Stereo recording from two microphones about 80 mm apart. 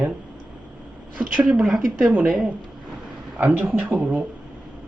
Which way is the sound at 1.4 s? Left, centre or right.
Centre.